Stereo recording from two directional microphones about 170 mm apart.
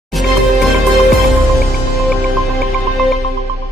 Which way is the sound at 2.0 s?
Centre (ahead or behind).